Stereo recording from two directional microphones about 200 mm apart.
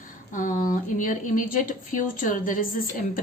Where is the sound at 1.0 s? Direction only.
40° left (ahead or behind).